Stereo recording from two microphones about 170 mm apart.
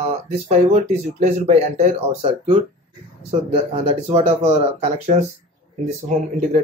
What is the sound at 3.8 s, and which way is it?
Speech, 35° right (ahead or behind).